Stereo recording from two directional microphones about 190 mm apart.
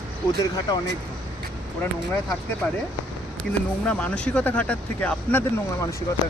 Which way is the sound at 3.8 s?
5° left (ahead or behind).